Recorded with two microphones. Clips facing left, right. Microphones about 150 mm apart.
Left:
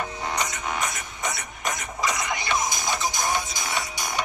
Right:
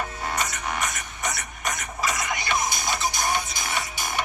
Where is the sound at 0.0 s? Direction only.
20° left (ahead or behind).